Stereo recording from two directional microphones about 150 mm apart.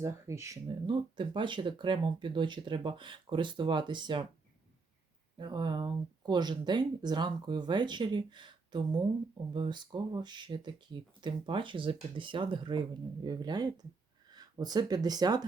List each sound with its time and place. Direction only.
0.0 s speech: 20° right (ahead or behind)
0.9 s speech: 30° right (ahead or behind)
5.4 s speech: 30° right (ahead or behind)